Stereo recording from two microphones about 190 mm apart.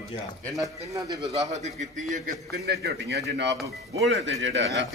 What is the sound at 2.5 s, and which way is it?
A man's voice, 60° right (ahead or behind).